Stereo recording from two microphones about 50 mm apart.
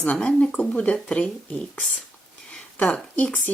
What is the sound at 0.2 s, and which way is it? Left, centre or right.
Speech, left.